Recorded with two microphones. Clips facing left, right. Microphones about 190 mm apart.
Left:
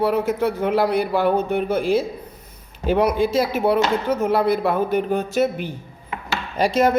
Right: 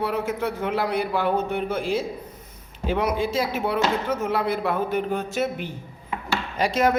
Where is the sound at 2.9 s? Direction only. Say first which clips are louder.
Left 5 dB; 35° left (ahead or behind).